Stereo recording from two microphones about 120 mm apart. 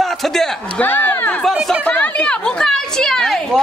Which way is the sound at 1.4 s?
Centre (ahead or behind).